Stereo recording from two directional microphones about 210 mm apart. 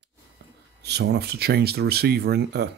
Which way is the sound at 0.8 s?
50° right (ahead or behind).